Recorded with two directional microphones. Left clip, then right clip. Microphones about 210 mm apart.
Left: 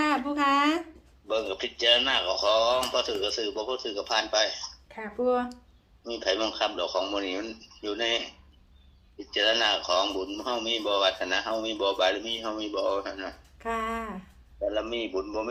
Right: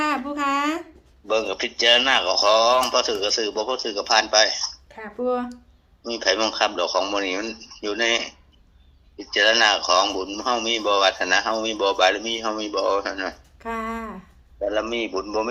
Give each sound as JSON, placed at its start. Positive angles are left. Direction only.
{"t": 0.0, "sound": "a sound", "side_deg": -5}
{"t": 1.3, "sound": "a man's voice", "side_deg": -50}
{"t": 4.9, "sound": "speech", "side_deg": 0}
{"t": 6.0, "sound": "a man's voice", "side_deg": -50}
{"t": 13.6, "sound": "speech", "side_deg": 0}
{"t": 14.6, "sound": "a man's voice", "side_deg": -50}